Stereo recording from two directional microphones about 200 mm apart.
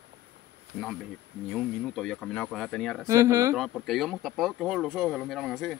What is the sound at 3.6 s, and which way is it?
Speech, centre (ahead or behind).